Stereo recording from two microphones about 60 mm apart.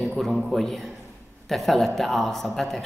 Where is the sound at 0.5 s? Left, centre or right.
Centre.